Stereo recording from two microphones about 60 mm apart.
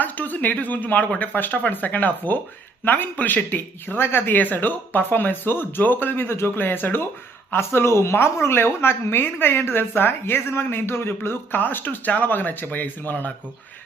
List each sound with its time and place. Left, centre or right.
0.0 s a woman's voice: left